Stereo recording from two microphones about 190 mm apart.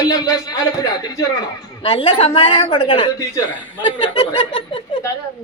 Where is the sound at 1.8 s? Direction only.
30° left (ahead or behind).